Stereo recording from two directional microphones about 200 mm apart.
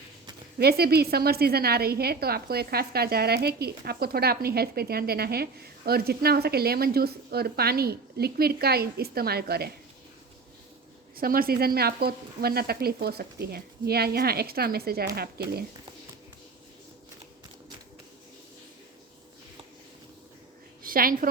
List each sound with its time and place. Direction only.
0.6 s a woman's voice: 50° right (ahead or behind)
11.2 s a woman's voice: 45° right (ahead or behind)
20.8 s a woman's voice: 45° right (ahead or behind)